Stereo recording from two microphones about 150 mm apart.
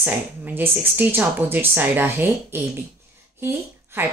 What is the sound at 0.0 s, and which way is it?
Speech, 10° right (ahead or behind).